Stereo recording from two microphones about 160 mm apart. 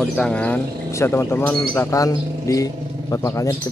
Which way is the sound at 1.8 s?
20° left (ahead or behind).